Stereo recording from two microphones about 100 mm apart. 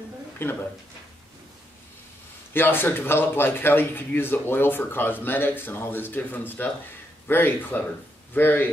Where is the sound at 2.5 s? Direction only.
20° left (ahead or behind).